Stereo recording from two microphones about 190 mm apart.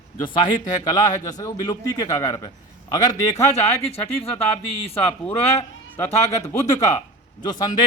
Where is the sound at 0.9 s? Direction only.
20° left (ahead or behind).